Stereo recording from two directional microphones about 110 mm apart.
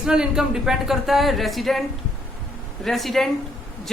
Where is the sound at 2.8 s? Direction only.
Centre (ahead or behind).